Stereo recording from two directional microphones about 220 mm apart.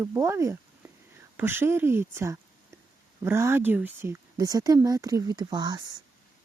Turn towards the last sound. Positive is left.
turn(degrees=-20)  # may be behind; listen again after turning